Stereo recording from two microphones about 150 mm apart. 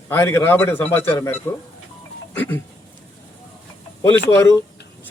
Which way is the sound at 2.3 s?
10° left (ahead or behind).